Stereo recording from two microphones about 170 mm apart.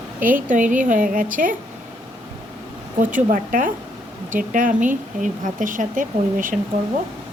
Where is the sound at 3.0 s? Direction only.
50° right (ahead or behind).